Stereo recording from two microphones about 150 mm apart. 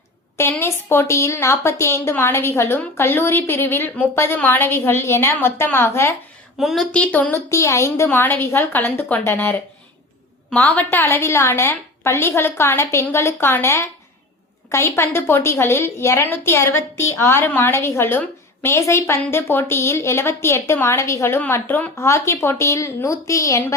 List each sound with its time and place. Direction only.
0.3 s a woman's voice: 15° left (ahead or behind)
6.6 s a woman's voice: centre (ahead or behind); by 23.7 s 20° left (ahead or behind)